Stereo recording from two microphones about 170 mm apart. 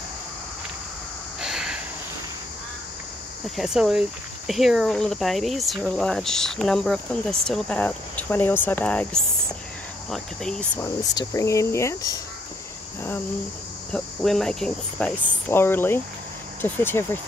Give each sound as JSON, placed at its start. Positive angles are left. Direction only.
{"t": 1.4, "sound": "a sound", "side_deg": -5}
{"t": 3.5, "sound": "speech", "side_deg": -5}
{"t": 10.8, "sound": "speech", "side_deg": 20}
{"t": 13.9, "sound": "speech", "side_deg": 0}